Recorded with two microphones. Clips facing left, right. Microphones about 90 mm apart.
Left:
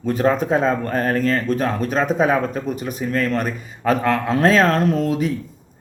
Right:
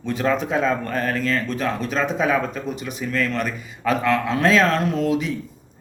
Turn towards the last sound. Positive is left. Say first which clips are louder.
# left 2 dB
turn(degrees=40)  # may be behind; listen again after turning